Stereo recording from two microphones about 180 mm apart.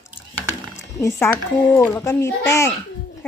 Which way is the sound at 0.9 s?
15° left (ahead or behind).